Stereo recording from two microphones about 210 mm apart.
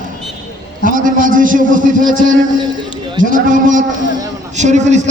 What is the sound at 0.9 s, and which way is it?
Speech, 40° right (ahead or behind).